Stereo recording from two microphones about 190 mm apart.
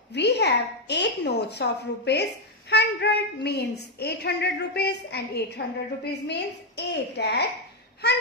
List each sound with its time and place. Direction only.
0.1 s a woman's voice: 65° left (ahead or behind)